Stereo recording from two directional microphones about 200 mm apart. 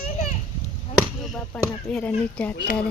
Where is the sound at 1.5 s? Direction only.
5° left (ahead or behind).